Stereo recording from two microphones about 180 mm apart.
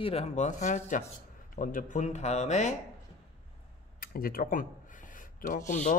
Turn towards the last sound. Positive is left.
turn(degrees=45)  # may be behind; listen again after turning